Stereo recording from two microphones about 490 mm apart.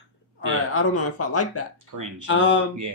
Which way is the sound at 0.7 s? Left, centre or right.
Left.